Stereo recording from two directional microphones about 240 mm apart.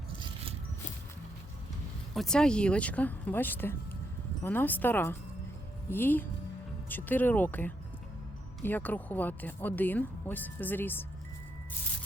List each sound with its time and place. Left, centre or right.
2.1 s speech: centre